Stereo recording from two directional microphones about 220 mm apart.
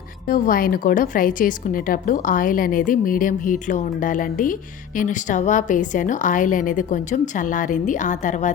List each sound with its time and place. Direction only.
0.3 s a woman's voice: 40° left (ahead or behind)